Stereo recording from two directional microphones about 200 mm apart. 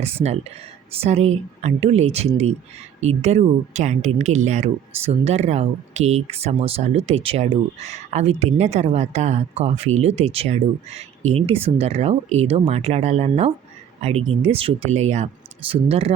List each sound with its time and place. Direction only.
0.0 s speech: 30° right (ahead or behind)